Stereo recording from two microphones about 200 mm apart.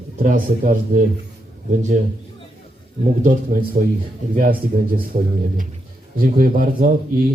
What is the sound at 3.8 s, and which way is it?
A man's voice, 45° right (ahead or behind).